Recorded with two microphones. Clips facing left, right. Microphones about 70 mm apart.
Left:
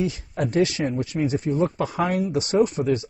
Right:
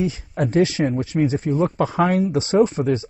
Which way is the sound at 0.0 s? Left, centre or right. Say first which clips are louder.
Right 3 dB; right.